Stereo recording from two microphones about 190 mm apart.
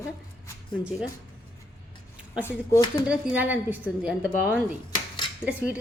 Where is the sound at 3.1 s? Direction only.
10° right (ahead or behind).